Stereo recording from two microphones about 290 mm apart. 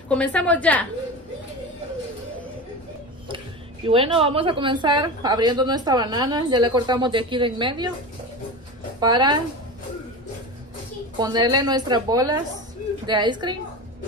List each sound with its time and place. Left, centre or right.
0.1 s a woman's voice: centre
3.8 s a woman's voice: centre
9.0 s a woman's voice: centre
11.1 s a woman's voice: centre